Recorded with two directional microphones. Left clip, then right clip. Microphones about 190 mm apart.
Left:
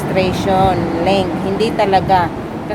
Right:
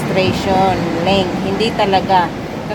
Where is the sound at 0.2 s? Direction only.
10° left (ahead or behind).